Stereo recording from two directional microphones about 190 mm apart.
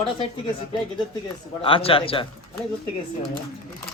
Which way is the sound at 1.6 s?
30° left (ahead or behind).